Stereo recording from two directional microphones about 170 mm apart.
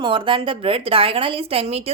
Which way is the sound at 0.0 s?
30° right (ahead or behind).